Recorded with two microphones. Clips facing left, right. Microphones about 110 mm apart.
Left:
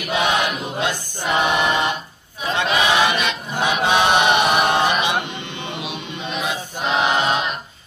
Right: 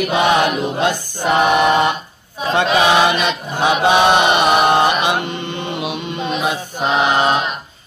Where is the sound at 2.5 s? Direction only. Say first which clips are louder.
Right 5 dB; 55° right (ahead or behind).